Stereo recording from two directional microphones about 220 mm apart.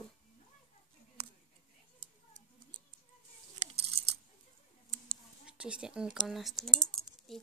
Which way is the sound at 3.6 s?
30° right (ahead or behind).